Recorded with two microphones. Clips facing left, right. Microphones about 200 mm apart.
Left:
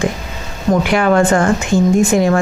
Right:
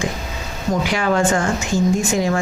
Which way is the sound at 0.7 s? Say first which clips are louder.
Left 6 dB; 60° left (ahead or behind).